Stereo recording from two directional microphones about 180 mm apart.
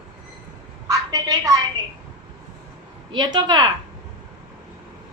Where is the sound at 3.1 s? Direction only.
25° right (ahead or behind).